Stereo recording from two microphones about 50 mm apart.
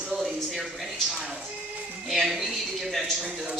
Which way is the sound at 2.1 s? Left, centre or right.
Centre.